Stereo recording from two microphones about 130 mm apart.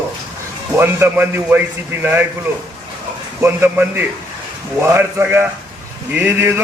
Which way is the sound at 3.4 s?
20° right (ahead or behind).